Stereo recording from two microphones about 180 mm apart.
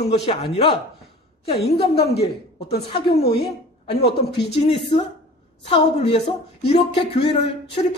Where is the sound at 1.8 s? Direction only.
35° left (ahead or behind).